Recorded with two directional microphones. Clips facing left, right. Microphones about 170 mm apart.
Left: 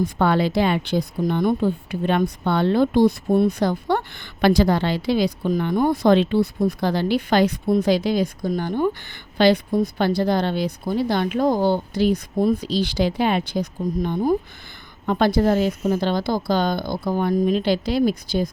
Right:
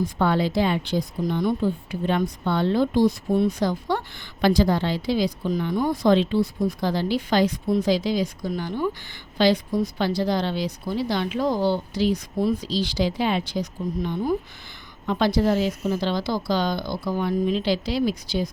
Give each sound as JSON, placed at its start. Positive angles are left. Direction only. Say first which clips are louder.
{"t": 0.2, "sound": "a woman's voice", "louder": "left 2 dB", "side_deg": 65}